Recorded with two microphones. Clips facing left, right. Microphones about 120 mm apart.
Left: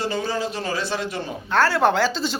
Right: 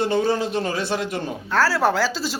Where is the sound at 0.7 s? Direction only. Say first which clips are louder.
Right 2 dB; 50° right (ahead or behind).